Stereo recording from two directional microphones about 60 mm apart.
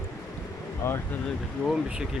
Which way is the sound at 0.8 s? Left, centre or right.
Left.